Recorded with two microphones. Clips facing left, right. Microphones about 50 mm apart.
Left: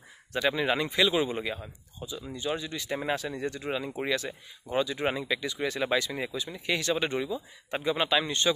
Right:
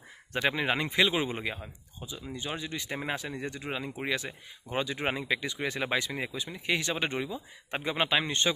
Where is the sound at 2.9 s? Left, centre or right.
Centre.